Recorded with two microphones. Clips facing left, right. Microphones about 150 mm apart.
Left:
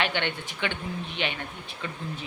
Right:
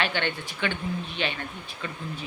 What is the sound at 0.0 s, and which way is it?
Speech, 20° left (ahead or behind).